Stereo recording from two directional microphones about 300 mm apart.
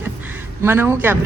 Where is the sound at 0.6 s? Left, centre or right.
Centre.